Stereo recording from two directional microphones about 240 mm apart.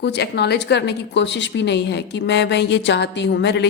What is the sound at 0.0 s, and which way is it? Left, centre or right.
A woman's voice, left.